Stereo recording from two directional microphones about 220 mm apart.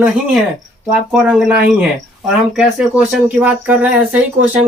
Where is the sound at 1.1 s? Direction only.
5° right (ahead or behind).